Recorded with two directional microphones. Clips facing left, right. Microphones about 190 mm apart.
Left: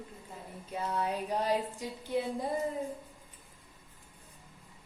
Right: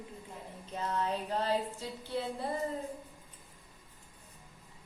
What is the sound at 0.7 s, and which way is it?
A woman's voice, 10° left (ahead or behind).